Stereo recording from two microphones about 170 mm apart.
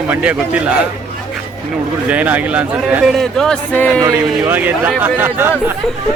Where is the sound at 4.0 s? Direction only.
20° right (ahead or behind).